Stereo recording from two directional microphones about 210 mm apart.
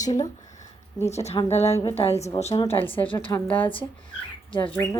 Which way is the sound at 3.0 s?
15° left (ahead or behind).